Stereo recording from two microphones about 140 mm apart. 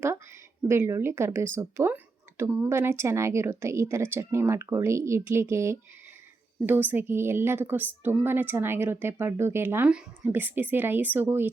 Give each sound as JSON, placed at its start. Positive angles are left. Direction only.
{"t": 0.7, "sound": "a woman's voice", "side_deg": -20}